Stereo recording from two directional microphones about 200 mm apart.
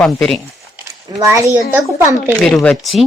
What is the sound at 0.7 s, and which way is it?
Speech, 15° right (ahead or behind).